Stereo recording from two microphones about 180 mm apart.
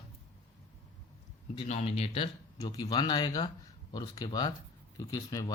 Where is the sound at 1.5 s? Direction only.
35° left (ahead or behind); by 5.5 s 20° left (ahead or behind).